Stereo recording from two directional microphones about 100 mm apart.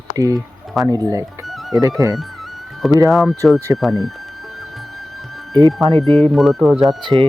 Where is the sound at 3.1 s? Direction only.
Centre (ahead or behind).